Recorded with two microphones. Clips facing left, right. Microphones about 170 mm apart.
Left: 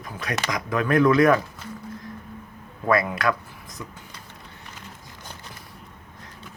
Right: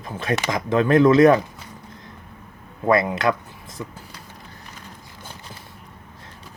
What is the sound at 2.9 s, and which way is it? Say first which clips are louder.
Speech: right 3 dB; 25° right (ahead or behind).